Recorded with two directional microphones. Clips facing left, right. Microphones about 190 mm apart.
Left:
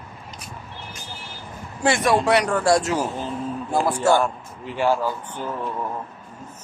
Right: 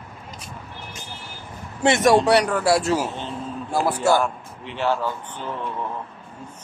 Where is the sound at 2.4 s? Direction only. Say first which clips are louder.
Left 1 dB; 5° right (ahead or behind).